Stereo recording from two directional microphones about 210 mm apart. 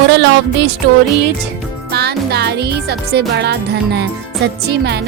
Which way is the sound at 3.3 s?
50° right (ahead or behind).